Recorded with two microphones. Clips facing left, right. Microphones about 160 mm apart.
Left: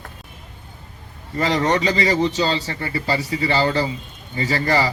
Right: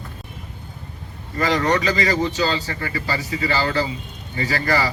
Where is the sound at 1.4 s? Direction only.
25° left (ahead or behind).